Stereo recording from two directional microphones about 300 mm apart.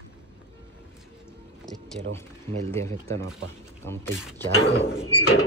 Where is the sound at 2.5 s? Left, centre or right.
Centre.